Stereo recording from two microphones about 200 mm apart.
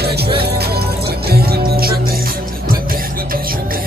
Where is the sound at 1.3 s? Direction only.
50° right (ahead or behind).